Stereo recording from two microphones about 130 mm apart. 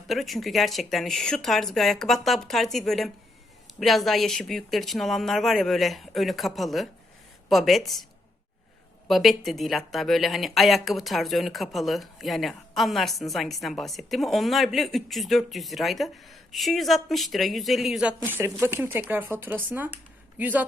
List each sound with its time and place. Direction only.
0.1 s speech: centre (ahead or behind)
9.0 s speech: centre (ahead or behind)
18.2 s speech: 15° right (ahead or behind)